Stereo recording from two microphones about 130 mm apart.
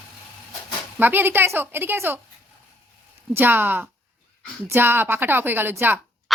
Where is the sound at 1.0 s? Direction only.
15° right (ahead or behind).